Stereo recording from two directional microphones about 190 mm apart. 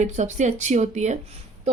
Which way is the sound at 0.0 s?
40° right (ahead or behind).